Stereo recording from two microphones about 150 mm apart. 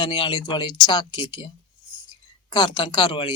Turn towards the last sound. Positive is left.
turn(degrees=35)  # may be behind; listen again after turning